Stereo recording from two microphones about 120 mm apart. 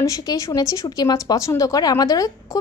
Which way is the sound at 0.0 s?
30° left (ahead or behind).